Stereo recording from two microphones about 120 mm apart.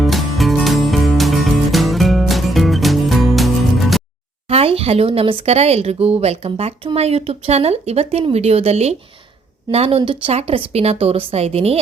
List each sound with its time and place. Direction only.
0.0 s music: centre (ahead or behind)
4.4 s speech: 55° right (ahead or behind)